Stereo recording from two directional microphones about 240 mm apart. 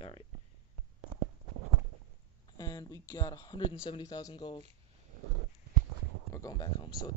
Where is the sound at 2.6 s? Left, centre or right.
Centre.